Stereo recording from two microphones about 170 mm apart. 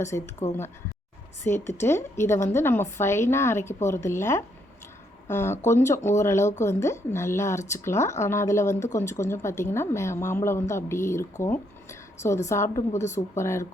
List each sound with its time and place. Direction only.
0.4 s speech: 15° left (ahead or behind)